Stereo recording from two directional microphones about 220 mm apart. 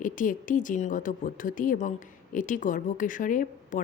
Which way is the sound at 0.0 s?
35° left (ahead or behind).